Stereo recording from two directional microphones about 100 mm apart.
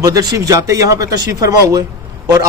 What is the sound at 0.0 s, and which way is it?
A man's voice, 35° right (ahead or behind).